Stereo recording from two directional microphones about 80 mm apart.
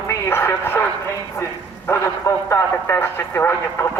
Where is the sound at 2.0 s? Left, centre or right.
Left.